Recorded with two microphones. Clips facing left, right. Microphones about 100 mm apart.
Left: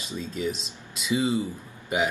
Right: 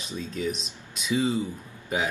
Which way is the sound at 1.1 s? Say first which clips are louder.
Even; 15° left (ahead or behind).